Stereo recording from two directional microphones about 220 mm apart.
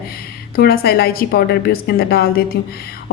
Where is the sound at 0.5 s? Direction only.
45° left (ahead or behind).